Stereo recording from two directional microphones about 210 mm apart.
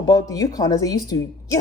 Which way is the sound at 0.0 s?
15° left (ahead or behind).